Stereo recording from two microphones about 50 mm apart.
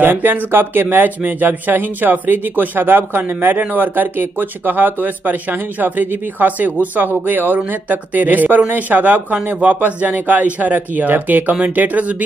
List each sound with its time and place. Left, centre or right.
0.0 s speech: right